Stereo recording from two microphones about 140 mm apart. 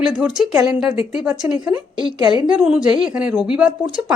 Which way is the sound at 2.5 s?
5° right (ahead or behind).